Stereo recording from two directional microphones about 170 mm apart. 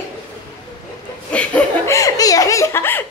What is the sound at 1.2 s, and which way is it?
Speech, 5° left (ahead or behind).